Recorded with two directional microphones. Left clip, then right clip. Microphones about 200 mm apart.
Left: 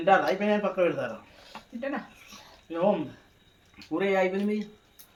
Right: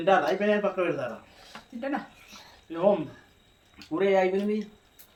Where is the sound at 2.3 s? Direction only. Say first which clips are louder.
Left 2 dB; 15° left (ahead or behind).